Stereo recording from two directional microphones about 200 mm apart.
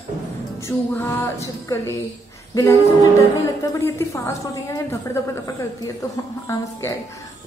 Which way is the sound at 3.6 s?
15° left (ahead or behind).